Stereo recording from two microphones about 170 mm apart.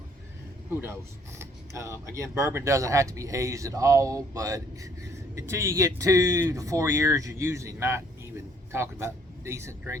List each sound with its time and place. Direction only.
1.4 s speech: 15° right (ahead or behind)